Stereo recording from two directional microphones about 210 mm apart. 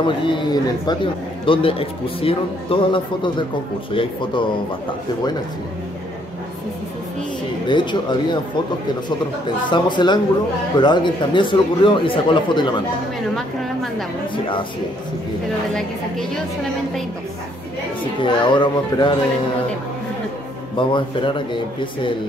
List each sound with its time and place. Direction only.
0.0 s a man's voice: 25° left (ahead or behind)
7.6 s a man's voice: 20° left (ahead or behind)
9.7 s a man's voice: 20° left (ahead or behind)
18.2 s a man's voice: 20° left (ahead or behind)
20.7 s a man's voice: 25° left (ahead or behind)